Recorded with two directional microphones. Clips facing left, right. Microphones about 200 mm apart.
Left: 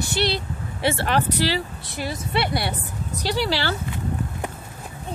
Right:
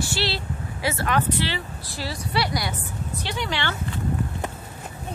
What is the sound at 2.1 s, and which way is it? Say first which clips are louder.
Speech: left 1 dB; 25° left (ahead or behind).